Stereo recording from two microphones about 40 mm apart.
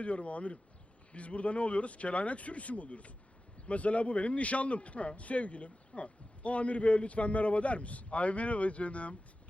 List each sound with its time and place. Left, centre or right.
0.0 s a man's voice: left